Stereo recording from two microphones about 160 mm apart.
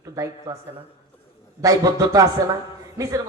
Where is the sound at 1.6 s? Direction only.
20° right (ahead or behind).